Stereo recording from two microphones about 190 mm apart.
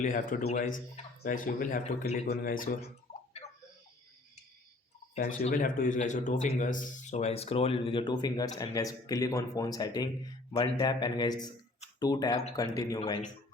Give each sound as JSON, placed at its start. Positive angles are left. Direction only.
{"t": 0.0, "sound": "speech", "side_deg": 45}
{"t": 5.1, "sound": "a man's voice", "side_deg": 50}